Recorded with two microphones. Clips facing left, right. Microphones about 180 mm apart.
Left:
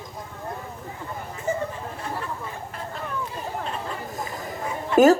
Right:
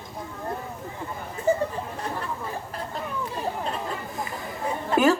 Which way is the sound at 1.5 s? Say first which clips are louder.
Right 4 dB; 35° right (ahead or behind).